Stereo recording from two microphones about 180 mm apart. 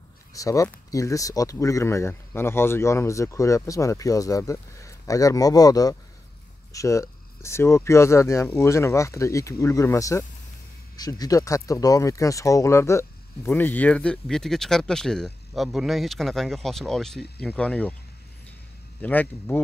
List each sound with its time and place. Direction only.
0.3 s speech: 20° left (ahead or behind)
18.9 s speech: 10° left (ahead or behind)